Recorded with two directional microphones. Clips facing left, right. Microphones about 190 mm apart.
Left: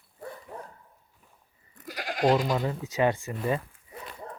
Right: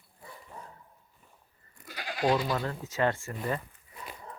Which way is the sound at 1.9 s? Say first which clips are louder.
Left 4 dB; 45° left (ahead or behind).